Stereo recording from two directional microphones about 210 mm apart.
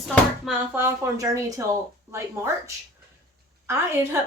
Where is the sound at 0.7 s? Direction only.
10° right (ahead or behind).